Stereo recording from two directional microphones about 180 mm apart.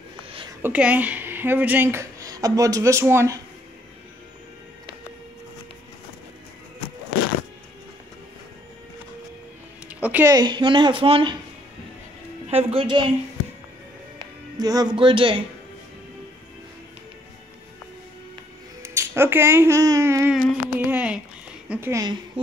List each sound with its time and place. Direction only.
0.6 s speech: 10° right (ahead or behind)
9.9 s a sound: 10° right (ahead or behind)
10.3 s speech: 25° right (ahead or behind)
12.4 s a woman's voice: 35° right (ahead or behind)
14.1 s speech: 20° right (ahead or behind)
18.8 s speech: 15° right (ahead or behind)
20.3 s a sound: 10° right (ahead or behind)
21.6 s speech: 10° right (ahead or behind)